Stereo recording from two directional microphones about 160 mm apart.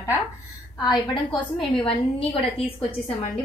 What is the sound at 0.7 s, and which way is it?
Speech, 25° left (ahead or behind).